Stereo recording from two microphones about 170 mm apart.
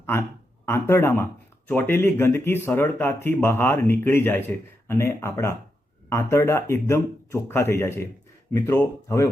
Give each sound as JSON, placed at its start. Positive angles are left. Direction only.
{"t": 0.0, "sound": "speech", "side_deg": 15}